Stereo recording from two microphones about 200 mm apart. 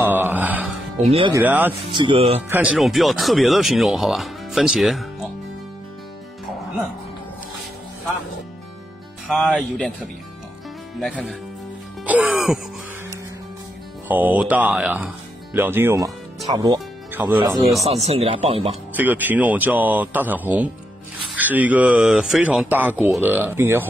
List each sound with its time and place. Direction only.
0.0 s music: 10° right (ahead or behind)
1.3 s speech: 10° right (ahead or behind)
1.7 s speech: 25° right (ahead or behind)
2.5 s speech: 5° right (ahead or behind)
9.3 s speech: centre (ahead or behind)
12.1 s music: 5° right (ahead or behind)
14.0 s speech: 10° right (ahead or behind)
16.4 s music: 20° right (ahead or behind)
17.8 s speech: 30° right (ahead or behind)
18.9 s speech: 10° right (ahead or behind)